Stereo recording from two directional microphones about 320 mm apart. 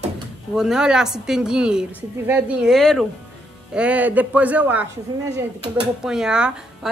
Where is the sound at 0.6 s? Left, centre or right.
Centre.